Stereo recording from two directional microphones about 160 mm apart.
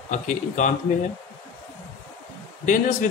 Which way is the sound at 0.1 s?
50° left (ahead or behind).